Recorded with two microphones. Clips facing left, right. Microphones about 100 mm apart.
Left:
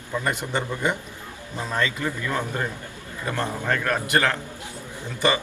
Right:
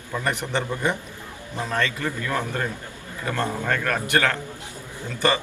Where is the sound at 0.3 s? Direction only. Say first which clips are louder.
Right 2 dB; 10° left (ahead or behind).